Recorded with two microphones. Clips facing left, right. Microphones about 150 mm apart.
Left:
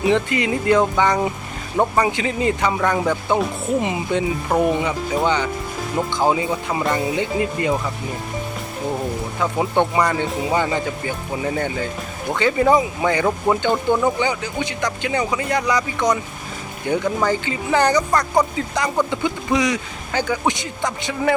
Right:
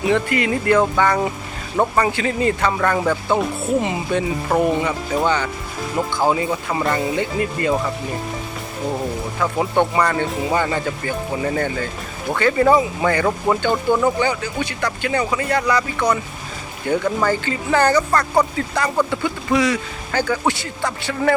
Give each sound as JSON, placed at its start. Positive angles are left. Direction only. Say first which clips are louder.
{"t": 0.1, "sound": "speech", "louder": "right 2 dB", "side_deg": 20}
{"t": 9.4, "sound": "speech", "louder": "right 1 dB", "side_deg": 15}